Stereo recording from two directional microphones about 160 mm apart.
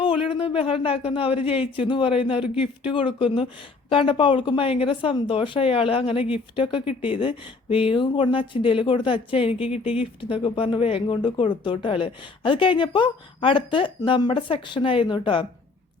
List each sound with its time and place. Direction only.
0.3 s speech: 35° left (ahead or behind)